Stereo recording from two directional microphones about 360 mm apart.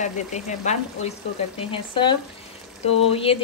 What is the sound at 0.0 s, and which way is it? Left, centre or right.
A woman's voice, centre.